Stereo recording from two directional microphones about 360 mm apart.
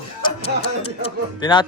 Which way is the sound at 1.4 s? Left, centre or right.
Centre.